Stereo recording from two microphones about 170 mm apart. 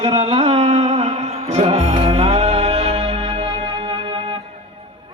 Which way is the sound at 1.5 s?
40° right (ahead or behind).